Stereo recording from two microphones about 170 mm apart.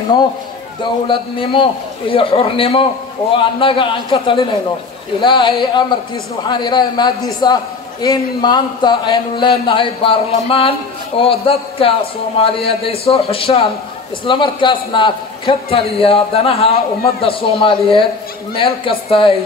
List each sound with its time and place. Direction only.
1.0 s a man's voice: 30° left (ahead or behind)